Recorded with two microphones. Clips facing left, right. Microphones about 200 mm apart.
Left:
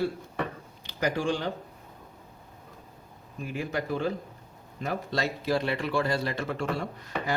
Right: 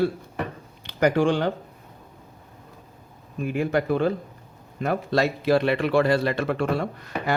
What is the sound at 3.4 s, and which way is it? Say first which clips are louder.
A man's voice: right 8 dB; 60° right (ahead or behind).